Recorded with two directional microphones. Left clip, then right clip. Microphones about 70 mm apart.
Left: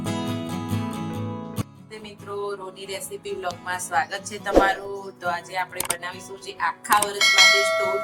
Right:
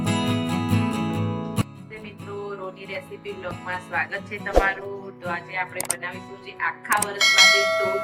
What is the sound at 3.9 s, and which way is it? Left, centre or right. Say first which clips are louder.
Speech: left 2 dB; left.